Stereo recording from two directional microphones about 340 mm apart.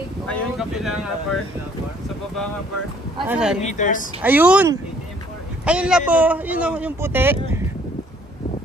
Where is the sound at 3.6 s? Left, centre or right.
Left.